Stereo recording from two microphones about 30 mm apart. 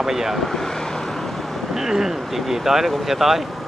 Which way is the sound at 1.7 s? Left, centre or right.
Centre.